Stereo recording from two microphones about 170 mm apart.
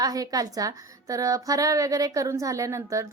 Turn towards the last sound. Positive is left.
turn(degrees=-15)  # may be behind; listen again after turning